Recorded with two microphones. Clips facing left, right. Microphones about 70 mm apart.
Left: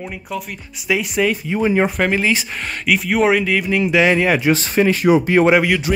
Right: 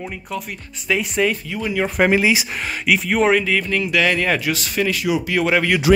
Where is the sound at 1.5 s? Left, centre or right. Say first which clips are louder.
Left 6 dB; left.